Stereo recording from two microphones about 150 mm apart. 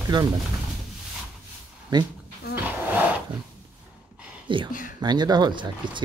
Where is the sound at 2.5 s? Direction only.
10° right (ahead or behind).